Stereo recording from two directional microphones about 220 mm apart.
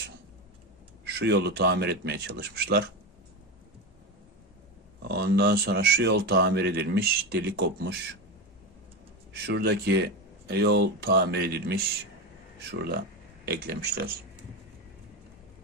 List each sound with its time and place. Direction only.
1.0 s speech: 50° right (ahead or behind)
5.0 s speech: 45° right (ahead or behind)
9.3 s speech: 45° right (ahead or behind)
13.4 s speech: 45° right (ahead or behind)